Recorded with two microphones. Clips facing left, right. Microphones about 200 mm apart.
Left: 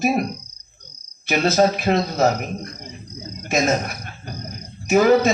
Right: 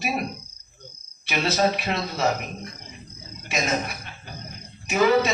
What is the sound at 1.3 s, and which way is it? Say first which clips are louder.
A man's voice: left 5 dB; 45° left (ahead or behind).